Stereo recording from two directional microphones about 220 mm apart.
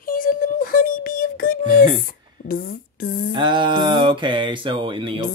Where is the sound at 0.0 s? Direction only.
40° left (ahead or behind).